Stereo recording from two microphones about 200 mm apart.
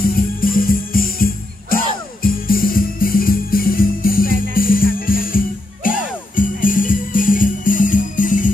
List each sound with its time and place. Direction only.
0.1 s music: 45° left (ahead or behind)